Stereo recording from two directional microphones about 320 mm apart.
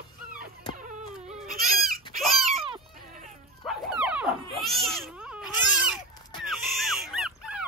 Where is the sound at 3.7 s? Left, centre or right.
Centre.